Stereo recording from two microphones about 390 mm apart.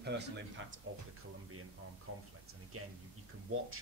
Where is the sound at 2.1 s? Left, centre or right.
Right.